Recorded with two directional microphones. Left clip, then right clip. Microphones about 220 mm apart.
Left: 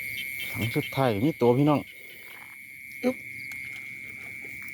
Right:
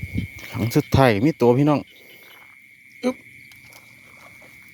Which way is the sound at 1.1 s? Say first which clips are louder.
Right 5 dB; 20° right (ahead or behind).